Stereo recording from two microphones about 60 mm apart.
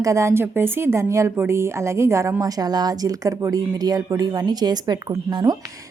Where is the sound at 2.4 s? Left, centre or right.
Right.